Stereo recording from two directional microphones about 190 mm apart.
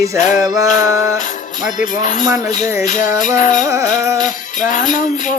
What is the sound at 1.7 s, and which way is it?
Music, 40° left (ahead or behind).